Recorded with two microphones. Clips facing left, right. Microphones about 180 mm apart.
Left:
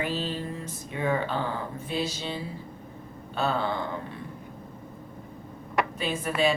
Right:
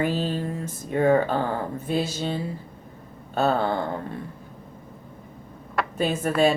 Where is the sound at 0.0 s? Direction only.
45° right (ahead or behind).